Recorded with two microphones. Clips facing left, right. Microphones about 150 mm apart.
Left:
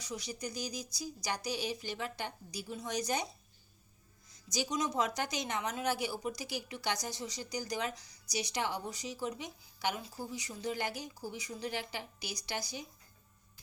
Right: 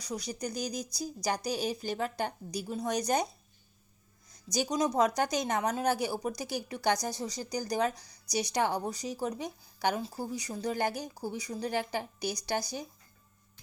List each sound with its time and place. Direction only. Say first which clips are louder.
0.0 s speech: right 4 dB; 40° right (ahead or behind)
4.4 s a woman's voice: right 5 dB; 40° right (ahead or behind)